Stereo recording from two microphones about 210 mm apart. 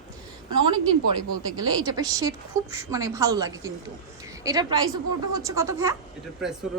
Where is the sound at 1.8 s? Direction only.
15° right (ahead or behind).